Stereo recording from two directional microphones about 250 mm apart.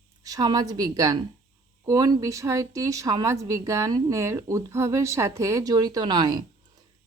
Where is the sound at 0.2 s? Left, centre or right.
Centre.